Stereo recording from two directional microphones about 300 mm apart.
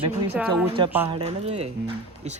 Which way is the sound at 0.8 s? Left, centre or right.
Centre.